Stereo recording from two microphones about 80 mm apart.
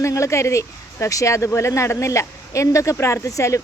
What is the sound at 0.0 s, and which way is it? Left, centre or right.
A woman's voice, left.